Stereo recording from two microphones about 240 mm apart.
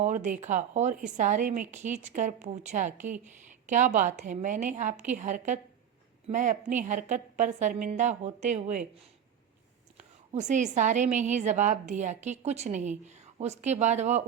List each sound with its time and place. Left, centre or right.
0.0 s speech: right
10.3 s a woman's voice: right